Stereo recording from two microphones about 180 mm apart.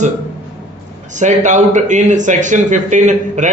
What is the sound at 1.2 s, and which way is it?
A man's voice, 40° right (ahead or behind).